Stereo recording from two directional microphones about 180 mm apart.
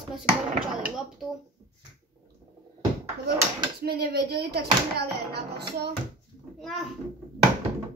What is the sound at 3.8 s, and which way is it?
Speech, 60° right (ahead or behind).